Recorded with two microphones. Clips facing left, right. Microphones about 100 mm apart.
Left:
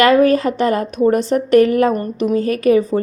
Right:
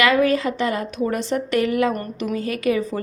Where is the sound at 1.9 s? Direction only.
25° left (ahead or behind).